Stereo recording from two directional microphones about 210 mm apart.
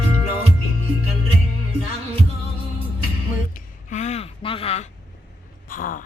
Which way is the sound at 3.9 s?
35° left (ahead or behind).